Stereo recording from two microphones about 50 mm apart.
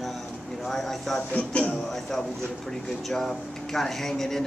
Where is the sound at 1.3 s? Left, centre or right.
Left.